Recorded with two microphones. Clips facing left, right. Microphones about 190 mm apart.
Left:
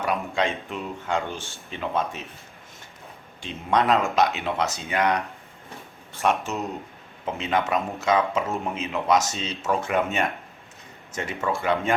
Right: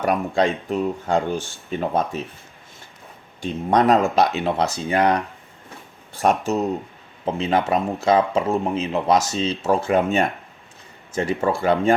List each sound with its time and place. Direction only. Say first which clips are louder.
0.0 s speech: right 5 dB; 40° right (ahead or behind)
3.4 s speech: right 5 dB; 40° right (ahead or behind)
6.1 s speech: right 5 dB; 40° right (ahead or behind)